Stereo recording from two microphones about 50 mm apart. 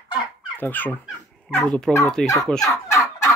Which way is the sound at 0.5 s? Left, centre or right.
Left.